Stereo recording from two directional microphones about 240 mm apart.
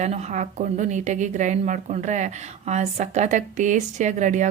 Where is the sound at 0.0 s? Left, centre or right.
Right.